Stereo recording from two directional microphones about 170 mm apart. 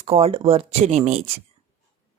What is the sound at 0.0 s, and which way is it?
Speech, 35° right (ahead or behind).